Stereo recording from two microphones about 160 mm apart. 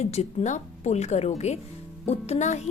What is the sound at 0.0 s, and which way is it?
Speech, 40° left (ahead or behind).